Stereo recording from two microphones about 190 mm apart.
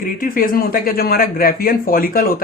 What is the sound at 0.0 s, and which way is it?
Speech, 45° left (ahead or behind).